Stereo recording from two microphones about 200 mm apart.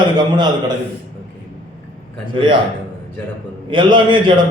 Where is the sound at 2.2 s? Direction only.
25° right (ahead or behind).